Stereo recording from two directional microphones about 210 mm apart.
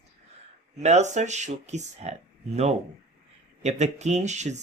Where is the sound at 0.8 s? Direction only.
35° right (ahead or behind).